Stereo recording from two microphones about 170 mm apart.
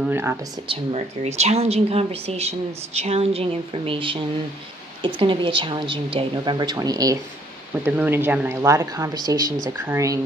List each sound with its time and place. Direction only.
0.0 s speech: 10° right (ahead or behind)
0.7 s a woman's voice: 40° right (ahead or behind); by 10.2 s 20° right (ahead or behind)